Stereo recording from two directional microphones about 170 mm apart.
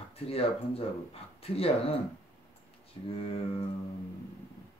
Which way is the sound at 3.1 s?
35° left (ahead or behind).